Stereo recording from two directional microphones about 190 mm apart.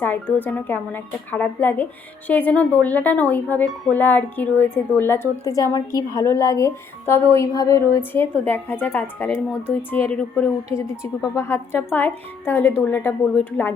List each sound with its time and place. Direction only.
0.0 s a woman's voice: 10° left (ahead or behind)
10.7 s a woman's voice: 15° left (ahead or behind)